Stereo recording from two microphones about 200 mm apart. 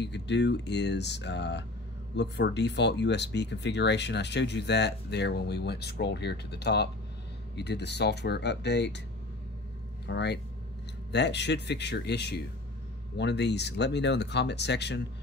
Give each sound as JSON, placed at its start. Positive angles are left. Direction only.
{"t": 0.0, "sound": "speech", "side_deg": 60}
{"t": 10.0, "sound": "speech", "side_deg": 60}